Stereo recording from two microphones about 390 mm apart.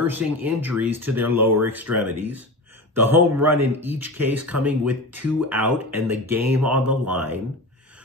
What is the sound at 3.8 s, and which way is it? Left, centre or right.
Speech, centre.